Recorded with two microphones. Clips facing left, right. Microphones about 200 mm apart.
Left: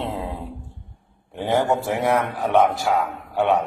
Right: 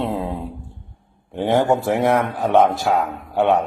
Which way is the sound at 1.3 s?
20° right (ahead or behind).